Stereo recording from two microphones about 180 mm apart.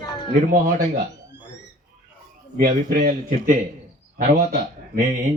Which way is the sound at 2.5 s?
55° right (ahead or behind).